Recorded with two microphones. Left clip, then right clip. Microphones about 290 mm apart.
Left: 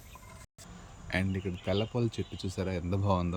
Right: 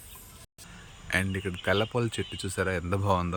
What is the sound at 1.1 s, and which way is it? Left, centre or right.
Speech, centre.